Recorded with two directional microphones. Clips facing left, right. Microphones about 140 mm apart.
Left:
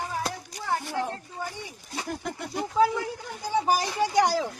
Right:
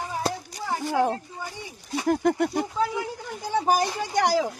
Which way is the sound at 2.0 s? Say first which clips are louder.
Right 13 dB; 60° right (ahead or behind).